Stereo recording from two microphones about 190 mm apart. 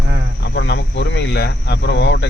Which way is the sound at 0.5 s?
65° left (ahead or behind).